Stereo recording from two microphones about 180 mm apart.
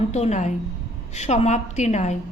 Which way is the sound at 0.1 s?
40° left (ahead or behind).